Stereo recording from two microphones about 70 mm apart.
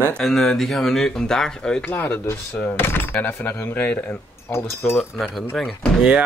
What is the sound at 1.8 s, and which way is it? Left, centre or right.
Speech, left.